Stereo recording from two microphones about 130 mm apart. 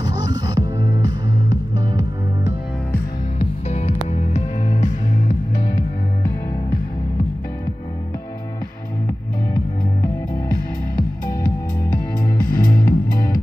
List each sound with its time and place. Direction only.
0.0 s music: 30° right (ahead or behind)
3.3 s music: 55° left (ahead or behind)
12.4 s music: 90° left